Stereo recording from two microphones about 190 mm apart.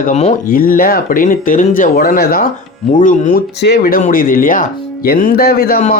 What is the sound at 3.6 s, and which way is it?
Speech, 55° left (ahead or behind).